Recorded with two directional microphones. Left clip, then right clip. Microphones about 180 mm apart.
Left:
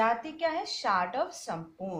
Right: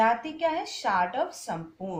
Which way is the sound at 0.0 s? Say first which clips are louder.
Right 4 dB; 10° left (ahead or behind).